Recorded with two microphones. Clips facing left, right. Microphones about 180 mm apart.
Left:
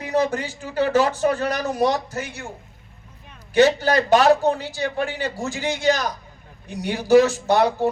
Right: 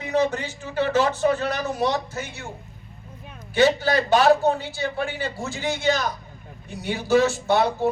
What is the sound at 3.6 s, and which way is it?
A man's voice, 40° left (ahead or behind).